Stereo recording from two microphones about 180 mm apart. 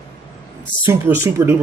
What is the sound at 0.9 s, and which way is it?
Speech, 15° right (ahead or behind).